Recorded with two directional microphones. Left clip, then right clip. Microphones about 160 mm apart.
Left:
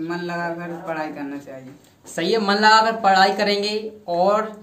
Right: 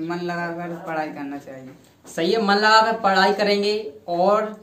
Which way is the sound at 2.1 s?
20° left (ahead or behind).